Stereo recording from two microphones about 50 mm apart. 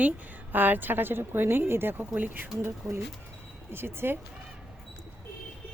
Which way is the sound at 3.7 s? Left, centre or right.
Right.